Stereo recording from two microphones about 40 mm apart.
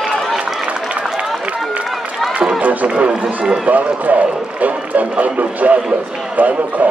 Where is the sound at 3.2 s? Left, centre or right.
Centre.